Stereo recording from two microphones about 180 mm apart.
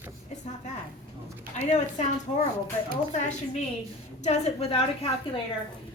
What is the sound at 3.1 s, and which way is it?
A woman's voice, 40° left (ahead or behind).